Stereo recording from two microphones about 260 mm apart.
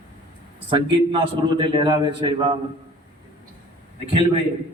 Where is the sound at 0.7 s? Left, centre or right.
Centre.